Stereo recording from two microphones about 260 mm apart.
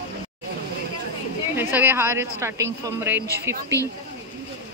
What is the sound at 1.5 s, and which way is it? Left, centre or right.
A woman's voice, centre.